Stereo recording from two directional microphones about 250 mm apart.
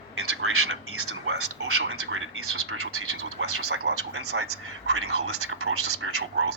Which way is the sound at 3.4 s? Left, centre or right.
Right.